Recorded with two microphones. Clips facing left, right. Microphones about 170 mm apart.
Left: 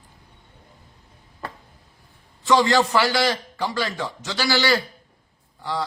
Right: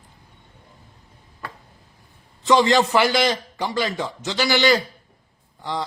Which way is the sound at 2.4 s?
20° right (ahead or behind).